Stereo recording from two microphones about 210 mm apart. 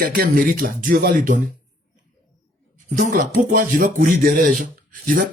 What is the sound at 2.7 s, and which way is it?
Speech, 35° right (ahead or behind).